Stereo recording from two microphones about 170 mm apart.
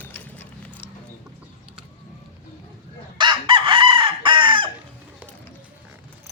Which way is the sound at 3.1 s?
25° right (ahead or behind).